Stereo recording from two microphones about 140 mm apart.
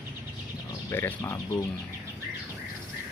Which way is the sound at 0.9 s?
20° left (ahead or behind).